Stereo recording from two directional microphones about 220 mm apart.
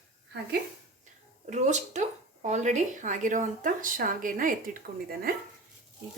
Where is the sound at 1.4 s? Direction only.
30° right (ahead or behind).